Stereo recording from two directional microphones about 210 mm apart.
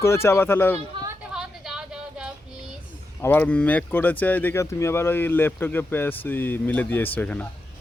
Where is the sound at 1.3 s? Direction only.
5° right (ahead or behind).